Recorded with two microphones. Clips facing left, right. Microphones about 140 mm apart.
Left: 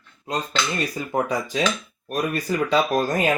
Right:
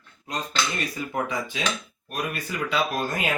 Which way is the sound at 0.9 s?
35° left (ahead or behind).